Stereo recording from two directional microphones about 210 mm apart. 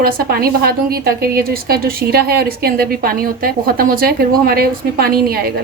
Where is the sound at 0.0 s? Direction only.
45° right (ahead or behind).